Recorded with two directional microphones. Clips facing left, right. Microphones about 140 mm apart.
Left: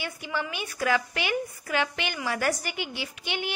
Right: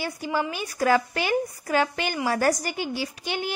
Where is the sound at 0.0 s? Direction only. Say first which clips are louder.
Right 5 dB; 40° right (ahead or behind).